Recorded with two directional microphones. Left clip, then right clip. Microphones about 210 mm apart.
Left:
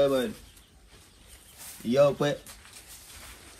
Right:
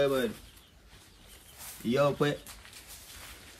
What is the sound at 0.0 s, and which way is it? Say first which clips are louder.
Speech: left 3 dB; centre (ahead or behind).